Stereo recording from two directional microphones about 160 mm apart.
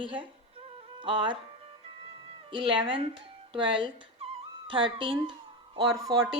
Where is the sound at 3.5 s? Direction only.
30° right (ahead or behind).